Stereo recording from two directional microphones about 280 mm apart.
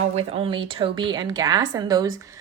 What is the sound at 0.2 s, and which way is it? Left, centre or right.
A woman's voice, centre.